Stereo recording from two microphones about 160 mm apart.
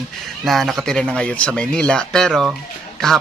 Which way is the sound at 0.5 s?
Centre (ahead or behind).